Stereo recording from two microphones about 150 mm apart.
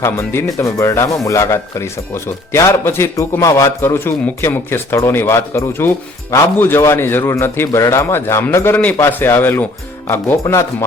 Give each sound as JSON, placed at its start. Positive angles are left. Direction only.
{"t": 0.0, "sound": "speech", "side_deg": 15}